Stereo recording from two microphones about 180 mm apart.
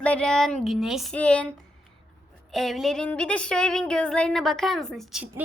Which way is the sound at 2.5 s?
Centre (ahead or behind).